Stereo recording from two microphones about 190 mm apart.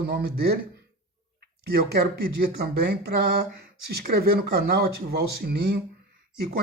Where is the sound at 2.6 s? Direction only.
55° right (ahead or behind).